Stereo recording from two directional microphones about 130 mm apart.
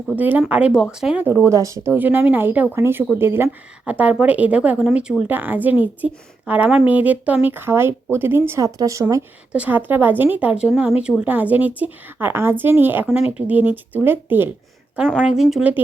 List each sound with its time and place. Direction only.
0.2 s speech: 15° right (ahead or behind)
1.2 s speech: 20° right (ahead or behind)
9.5 s speech: 10° right (ahead or behind)
15.2 s speech: 5° right (ahead or behind)